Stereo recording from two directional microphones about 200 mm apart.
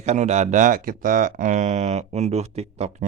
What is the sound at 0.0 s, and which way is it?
Speech, 35° right (ahead or behind).